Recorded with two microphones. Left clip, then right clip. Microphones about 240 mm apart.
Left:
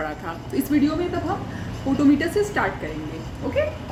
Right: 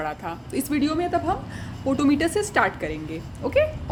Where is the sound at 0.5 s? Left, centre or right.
Right.